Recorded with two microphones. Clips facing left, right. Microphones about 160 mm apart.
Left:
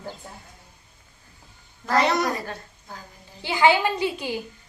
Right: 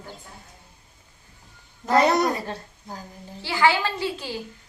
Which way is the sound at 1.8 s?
20° right (ahead or behind).